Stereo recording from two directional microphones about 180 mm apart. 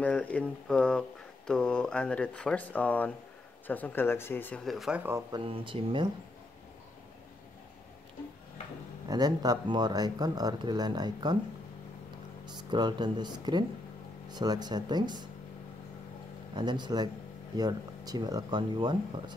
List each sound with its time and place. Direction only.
0.0 s speech: 10° left (ahead or behind)
4.7 s speech: 5° right (ahead or behind)
5.4 s speech: 30° right (ahead or behind)
9.1 s speech: 20° right (ahead or behind)
12.4 s speech: 25° right (ahead or behind)
16.5 s speech: 25° right (ahead or behind)